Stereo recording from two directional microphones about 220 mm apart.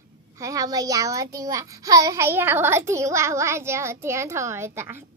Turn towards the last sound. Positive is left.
turn(degrees=-10)  # may be behind; listen again after turning